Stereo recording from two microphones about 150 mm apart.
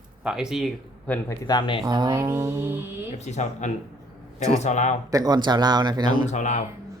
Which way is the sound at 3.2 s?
50° left (ahead or behind).